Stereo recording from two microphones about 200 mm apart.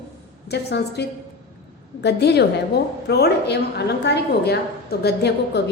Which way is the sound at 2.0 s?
55° left (ahead or behind).